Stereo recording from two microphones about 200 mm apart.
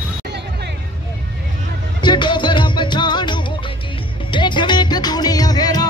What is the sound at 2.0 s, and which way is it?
Music, 25° left (ahead or behind).